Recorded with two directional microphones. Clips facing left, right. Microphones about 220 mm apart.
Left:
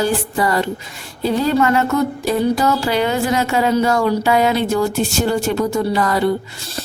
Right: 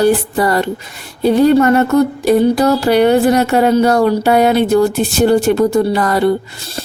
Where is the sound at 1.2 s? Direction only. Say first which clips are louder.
Right 8 dB; 60° right (ahead or behind).